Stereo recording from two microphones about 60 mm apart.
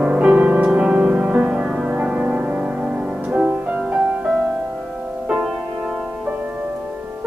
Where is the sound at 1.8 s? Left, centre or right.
Right.